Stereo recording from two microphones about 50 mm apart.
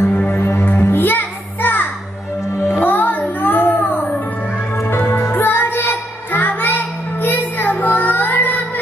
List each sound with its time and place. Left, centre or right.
0.1 s music: left
0.6 s music: left
5.3 s child singing: left